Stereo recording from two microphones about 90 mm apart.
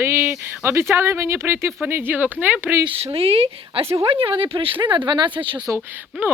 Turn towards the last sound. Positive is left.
turn(degrees=-25)  # may be behind; listen again after turning